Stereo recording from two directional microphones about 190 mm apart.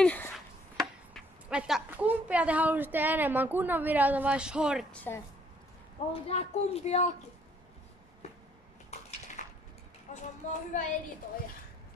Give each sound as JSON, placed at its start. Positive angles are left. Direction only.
{"t": 0.0, "sound": "speech", "side_deg": 5}
{"t": 0.7, "sound": "speech", "side_deg": -5}
{"t": 4.9, "sound": "a woman's voice", "side_deg": 10}
{"t": 6.1, "sound": "speech", "side_deg": 35}
{"t": 9.4, "sound": "a sound", "side_deg": 40}
{"t": 10.5, "sound": "speech", "side_deg": 40}